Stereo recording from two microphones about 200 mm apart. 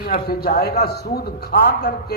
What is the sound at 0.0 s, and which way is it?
A man's voice, 50° left (ahead or behind).